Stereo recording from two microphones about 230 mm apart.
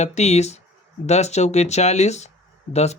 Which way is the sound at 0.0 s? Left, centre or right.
Left.